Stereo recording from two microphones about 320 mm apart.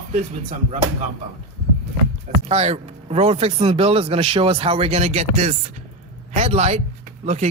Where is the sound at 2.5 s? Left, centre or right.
Centre.